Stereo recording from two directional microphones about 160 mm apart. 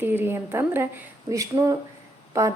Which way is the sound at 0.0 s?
15° right (ahead or behind).